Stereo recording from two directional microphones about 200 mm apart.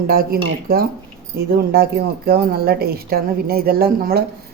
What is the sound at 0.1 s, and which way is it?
A woman's voice, 50° right (ahead or behind).